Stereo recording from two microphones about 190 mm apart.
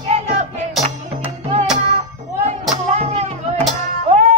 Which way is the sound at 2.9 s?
35° right (ahead or behind).